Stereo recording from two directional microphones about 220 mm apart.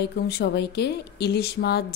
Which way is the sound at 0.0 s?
50° left (ahead or behind).